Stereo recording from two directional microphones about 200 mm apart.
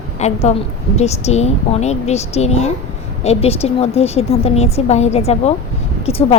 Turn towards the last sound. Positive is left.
turn(degrees=30)  # may be behind; listen again after turning